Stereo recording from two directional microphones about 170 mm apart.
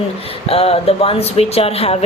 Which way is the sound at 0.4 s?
35° left (ahead or behind).